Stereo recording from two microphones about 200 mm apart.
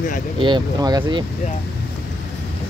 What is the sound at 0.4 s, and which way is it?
Speech, 20° right (ahead or behind).